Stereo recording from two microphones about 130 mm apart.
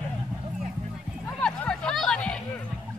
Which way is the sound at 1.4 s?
5° left (ahead or behind).